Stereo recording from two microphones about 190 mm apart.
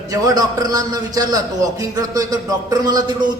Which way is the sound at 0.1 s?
20° right (ahead or behind).